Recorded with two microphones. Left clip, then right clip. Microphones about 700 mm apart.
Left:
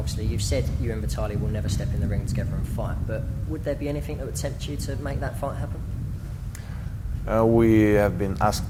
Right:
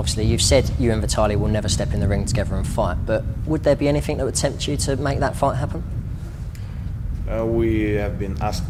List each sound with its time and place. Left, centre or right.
0.0 s speech: right
7.3 s speech: left